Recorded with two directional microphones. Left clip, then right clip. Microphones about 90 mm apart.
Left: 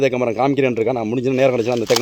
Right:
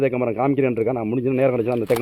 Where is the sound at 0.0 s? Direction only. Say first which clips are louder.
Left 3 dB; 25° left (ahead or behind).